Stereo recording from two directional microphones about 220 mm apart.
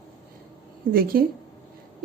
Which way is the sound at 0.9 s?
40° right (ahead or behind).